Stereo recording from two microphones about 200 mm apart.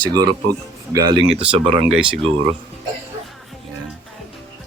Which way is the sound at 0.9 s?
20° right (ahead or behind).